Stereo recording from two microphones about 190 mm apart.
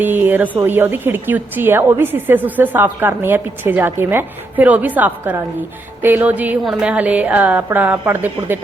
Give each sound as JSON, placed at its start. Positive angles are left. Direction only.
{"t": 0.0, "sound": "a woman's voice", "side_deg": -10}